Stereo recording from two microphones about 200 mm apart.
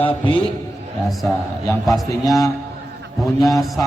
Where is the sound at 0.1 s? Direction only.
25° left (ahead or behind).